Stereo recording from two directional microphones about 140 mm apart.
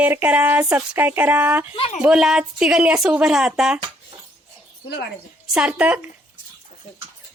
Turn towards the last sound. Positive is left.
turn(degrees=-10)  # may be behind; listen again after turning